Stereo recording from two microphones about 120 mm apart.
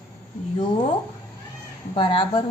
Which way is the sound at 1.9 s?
45° left (ahead or behind).